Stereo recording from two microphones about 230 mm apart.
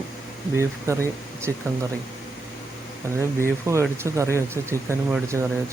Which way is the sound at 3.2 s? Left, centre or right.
Centre.